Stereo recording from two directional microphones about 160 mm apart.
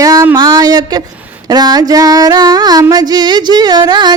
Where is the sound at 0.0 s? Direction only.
20° right (ahead or behind).